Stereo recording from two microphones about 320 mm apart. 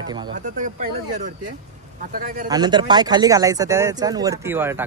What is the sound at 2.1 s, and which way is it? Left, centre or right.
Speech, right.